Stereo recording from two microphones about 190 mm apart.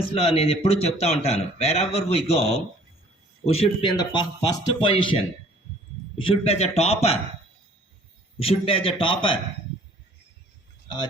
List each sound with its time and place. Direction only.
0.1 s a man's voice: 30° left (ahead or behind)
6.2 s a man's voice: 30° left (ahead or behind)
8.4 s a man's voice: 30° left (ahead or behind)